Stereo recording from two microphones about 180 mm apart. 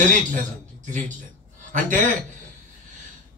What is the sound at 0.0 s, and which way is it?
A man's voice, 45° right (ahead or behind).